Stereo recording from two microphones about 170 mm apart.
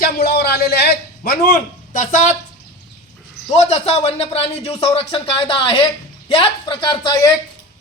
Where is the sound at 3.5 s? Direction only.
40° left (ahead or behind).